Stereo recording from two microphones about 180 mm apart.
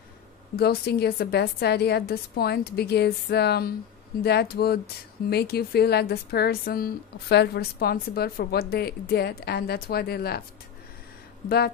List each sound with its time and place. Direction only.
0.6 s a woman's voice: 60° left (ahead or behind)
11.4 s a woman's voice: 60° left (ahead or behind)